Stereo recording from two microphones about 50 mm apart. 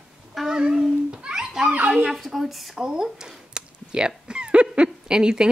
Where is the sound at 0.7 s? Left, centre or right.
Centre.